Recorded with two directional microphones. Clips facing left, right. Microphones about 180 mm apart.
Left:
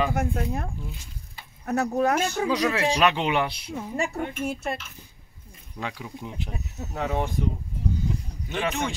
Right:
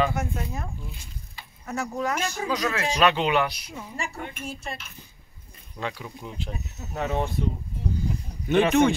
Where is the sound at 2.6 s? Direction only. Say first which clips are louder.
Left 3 dB; 30° left (ahead or behind).